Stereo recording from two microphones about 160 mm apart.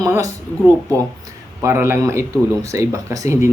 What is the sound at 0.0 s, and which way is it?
Speech, 20° right (ahead or behind).